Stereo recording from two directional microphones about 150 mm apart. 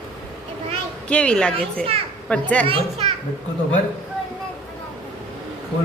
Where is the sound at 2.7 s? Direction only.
45° right (ahead or behind).